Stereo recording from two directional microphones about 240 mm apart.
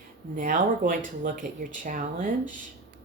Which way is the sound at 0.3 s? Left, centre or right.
Right.